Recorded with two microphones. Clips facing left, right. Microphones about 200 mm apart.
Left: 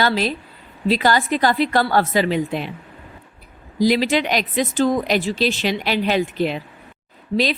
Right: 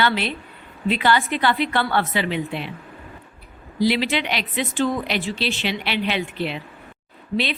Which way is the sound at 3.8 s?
40° left (ahead or behind).